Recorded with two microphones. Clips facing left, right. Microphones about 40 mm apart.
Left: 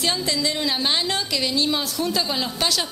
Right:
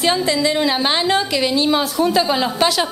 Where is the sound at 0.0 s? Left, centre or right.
Centre.